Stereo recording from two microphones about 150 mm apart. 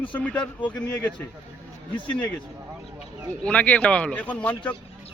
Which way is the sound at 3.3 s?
10° left (ahead or behind).